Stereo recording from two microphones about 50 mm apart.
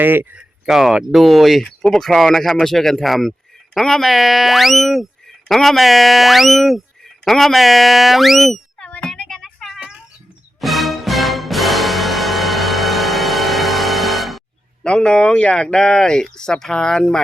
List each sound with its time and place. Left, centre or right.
0.0 s speech: right
0.6 s speech: centre
9.1 s a sound: centre
10.6 s music: centre
14.8 s speech: centre